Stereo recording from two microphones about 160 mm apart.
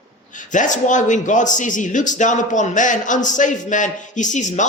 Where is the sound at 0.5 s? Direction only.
50° left (ahead or behind).